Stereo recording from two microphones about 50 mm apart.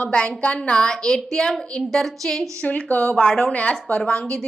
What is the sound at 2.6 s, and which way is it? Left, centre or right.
Speech, left.